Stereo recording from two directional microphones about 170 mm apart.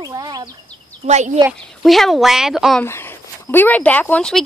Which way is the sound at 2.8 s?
15° left (ahead or behind).